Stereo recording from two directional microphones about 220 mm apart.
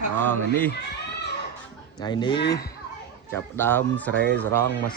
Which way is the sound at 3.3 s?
10° left (ahead or behind).